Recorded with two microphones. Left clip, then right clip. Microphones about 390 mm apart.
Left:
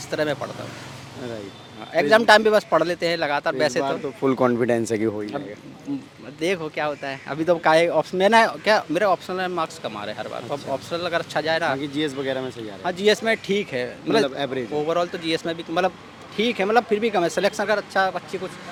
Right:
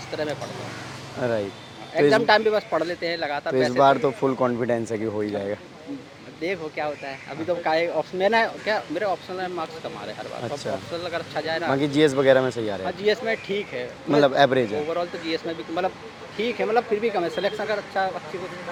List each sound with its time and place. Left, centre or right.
0.1 s speech: left
2.0 s speech: left
4.2 s speech: centre
6.4 s speech: left
11.8 s speech: centre
12.8 s speech: left
14.2 s speech: centre
14.8 s speech: left